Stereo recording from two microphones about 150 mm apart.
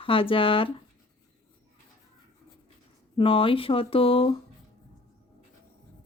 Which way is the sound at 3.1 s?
35° left (ahead or behind).